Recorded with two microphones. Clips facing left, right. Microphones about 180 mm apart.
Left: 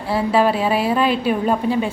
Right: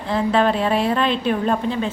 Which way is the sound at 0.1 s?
10° left (ahead or behind).